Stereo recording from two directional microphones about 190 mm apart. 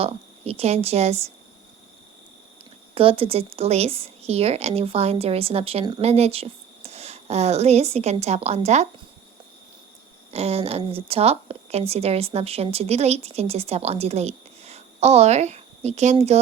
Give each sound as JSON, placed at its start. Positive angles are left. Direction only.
{"t": 0.0, "sound": "a woman's voice", "side_deg": -30}
{"t": 2.9, "sound": "a woman's voice", "side_deg": -30}
{"t": 10.3, "sound": "a woman's voice", "side_deg": -30}